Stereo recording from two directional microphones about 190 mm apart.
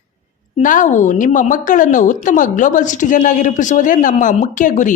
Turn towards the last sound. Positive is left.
turn(degrees=40)  # may be behind; listen again after turning